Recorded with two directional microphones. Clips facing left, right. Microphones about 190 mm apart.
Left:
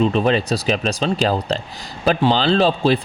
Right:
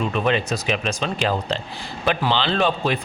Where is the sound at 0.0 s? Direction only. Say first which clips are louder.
Left 5 dB; 30° left (ahead or behind).